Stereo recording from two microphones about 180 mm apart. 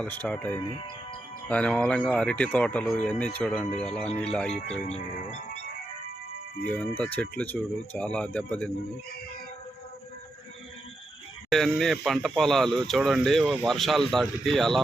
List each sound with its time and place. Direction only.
0.0 s speech: 10° left (ahead or behind)
4.6 s speech: 35° left (ahead or behind)
6.7 s speech: 10° left (ahead or behind)
11.4 s speech: centre (ahead or behind)